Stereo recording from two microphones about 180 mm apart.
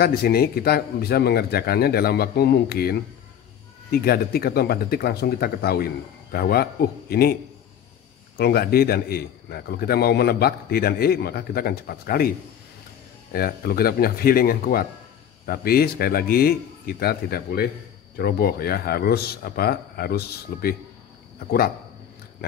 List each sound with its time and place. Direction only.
0.0 s a man's voice: 60° left (ahead or behind)
8.4 s a man's voice: 60° left (ahead or behind)
13.3 s a man's voice: 55° left (ahead or behind)